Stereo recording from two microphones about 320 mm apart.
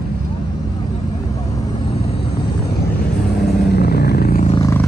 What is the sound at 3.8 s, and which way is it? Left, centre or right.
Vehicle, left.